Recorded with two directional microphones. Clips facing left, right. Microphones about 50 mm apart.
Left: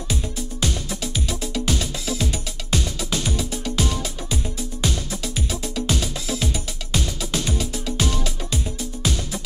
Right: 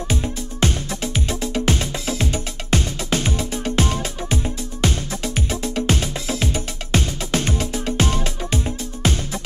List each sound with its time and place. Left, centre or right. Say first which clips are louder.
0.1 s music: right 1 dB; right